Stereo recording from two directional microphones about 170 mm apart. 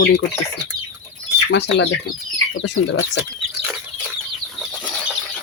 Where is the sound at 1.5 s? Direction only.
90° left.